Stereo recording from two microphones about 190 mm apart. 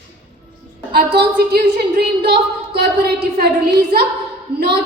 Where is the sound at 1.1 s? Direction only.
55° right (ahead or behind).